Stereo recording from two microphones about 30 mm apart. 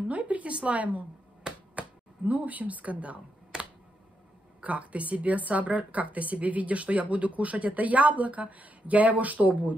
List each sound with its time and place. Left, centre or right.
0.1 s a sound: right
1.5 s finger snapping: right
1.8 s speech: right
3.5 s computer keyboard: right
4.6 s a woman's voice: right